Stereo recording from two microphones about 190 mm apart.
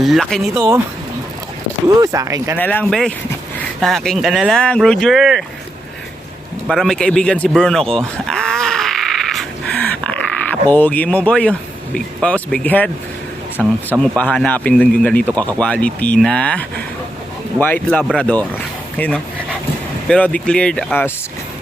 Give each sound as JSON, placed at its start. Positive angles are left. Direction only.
{"t": 0.0, "sound": "speech", "side_deg": 0}
{"t": 2.0, "sound": "speech", "side_deg": -15}
{"t": 2.6, "sound": "a man's voice", "side_deg": 10}
{"t": 6.7, "sound": "sheep", "side_deg": 0}
{"t": 11.9, "sound": "a man's voice", "side_deg": 5}
{"t": 13.6, "sound": "speech", "side_deg": -5}
{"t": 14.2, "sound": "a man's voice", "side_deg": 5}